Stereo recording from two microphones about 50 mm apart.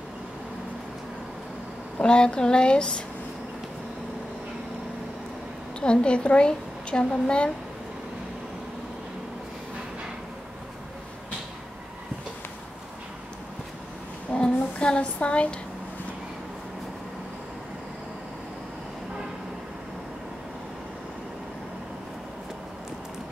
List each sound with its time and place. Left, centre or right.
2.0 s speech: centre
5.8 s a woman's voice: left
14.3 s child singing: centre